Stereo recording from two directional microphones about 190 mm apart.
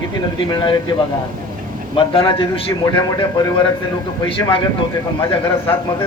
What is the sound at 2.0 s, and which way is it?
A man's voice, 30° left (ahead or behind).